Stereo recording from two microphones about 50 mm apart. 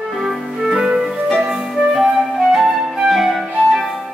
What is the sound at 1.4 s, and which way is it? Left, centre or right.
Flute, centre.